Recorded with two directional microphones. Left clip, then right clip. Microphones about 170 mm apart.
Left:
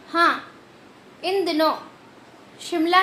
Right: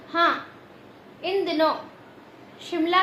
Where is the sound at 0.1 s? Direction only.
30° left (ahead or behind).